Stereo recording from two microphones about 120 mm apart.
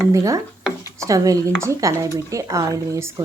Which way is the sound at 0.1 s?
25° right (ahead or behind).